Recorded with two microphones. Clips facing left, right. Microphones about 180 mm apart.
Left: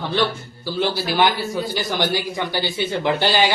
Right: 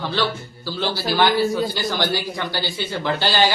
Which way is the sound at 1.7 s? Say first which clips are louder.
Left 1 dB; 15° left (ahead or behind).